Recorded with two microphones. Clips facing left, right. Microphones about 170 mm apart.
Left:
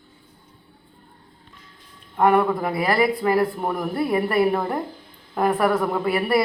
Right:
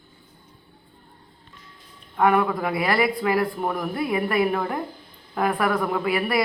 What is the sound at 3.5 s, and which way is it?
Speech, 10° left (ahead or behind).